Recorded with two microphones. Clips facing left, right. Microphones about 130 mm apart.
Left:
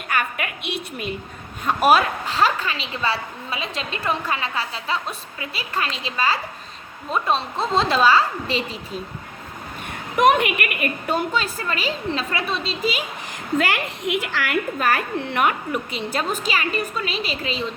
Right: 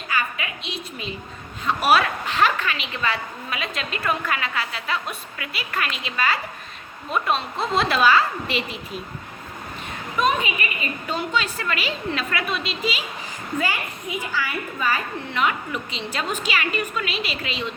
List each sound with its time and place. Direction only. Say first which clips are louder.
0.1 s a sound: left 2 dB; 55° left (ahead or behind)
1.6 s a woman's voice: left 2 dB; 45° left (ahead or behind)
10.2 s a woman's voice: left 5 dB; 70° left (ahead or behind); by 12.7 s 30° left (ahead or behind)
12.8 s a woman's voice: left 3 dB; 45° left (ahead or behind)
13.6 s a woman's voice: left 3 dB; 85° left; by 17.7 s 35° left (ahead or behind)